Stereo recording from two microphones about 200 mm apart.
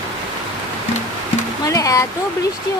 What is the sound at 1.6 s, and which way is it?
Speech, 15° left (ahead or behind).